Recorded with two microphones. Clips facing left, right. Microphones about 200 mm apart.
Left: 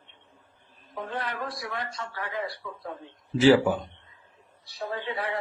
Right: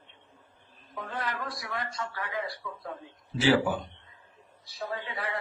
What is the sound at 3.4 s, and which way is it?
Speech, 40° left (ahead or behind).